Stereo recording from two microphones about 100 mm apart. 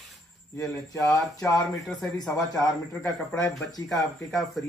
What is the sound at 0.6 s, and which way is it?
Speech, 30° left (ahead or behind).